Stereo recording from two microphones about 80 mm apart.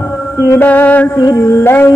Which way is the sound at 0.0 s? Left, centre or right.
Left.